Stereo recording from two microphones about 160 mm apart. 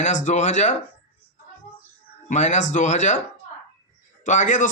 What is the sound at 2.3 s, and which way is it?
Speech, 50° left (ahead or behind).